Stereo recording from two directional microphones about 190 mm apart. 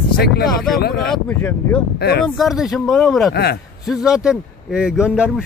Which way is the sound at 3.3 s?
55° left (ahead or behind).